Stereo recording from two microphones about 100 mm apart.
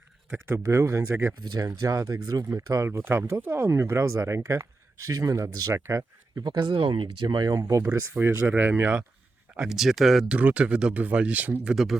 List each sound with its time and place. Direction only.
0.3 s speech: 25° right (ahead or behind)
1.5 s speech: 35° right (ahead or behind)
8.1 s speech: 20° right (ahead or behind)
9.6 s speech: 5° right (ahead or behind)
10.3 s speech: 15° right (ahead or behind)
11.7 s speech: 5° right (ahead or behind)